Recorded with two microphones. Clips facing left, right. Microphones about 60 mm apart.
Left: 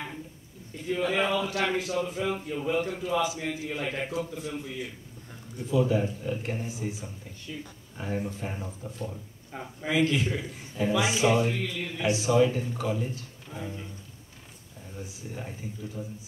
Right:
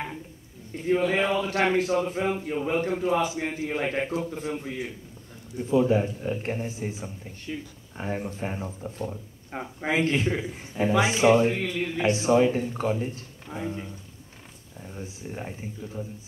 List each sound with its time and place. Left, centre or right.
0.8 s a man's voice: right
9.5 s a man's voice: right
15.2 s a man's voice: right